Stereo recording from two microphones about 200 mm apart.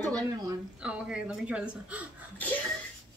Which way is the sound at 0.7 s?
5° right (ahead or behind).